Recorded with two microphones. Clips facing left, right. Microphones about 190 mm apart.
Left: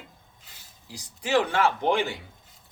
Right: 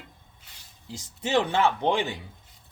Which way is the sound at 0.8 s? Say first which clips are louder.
Right 2 dB; 25° right (ahead or behind).